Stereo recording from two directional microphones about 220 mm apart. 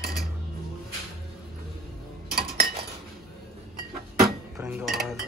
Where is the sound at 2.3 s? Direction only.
45° right (ahead or behind).